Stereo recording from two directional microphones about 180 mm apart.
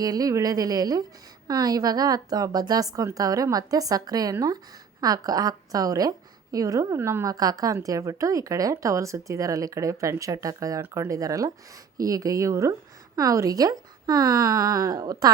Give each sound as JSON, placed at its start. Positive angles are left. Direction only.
{"t": 0.0, "sound": "a woman's voice", "side_deg": -20}